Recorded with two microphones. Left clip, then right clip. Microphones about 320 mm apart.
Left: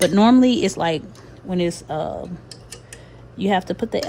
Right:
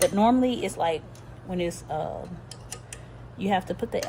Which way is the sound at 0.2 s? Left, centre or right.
Left.